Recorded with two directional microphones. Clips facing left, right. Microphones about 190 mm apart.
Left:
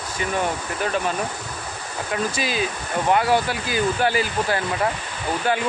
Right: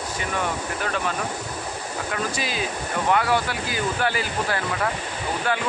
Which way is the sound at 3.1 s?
30° left (ahead or behind).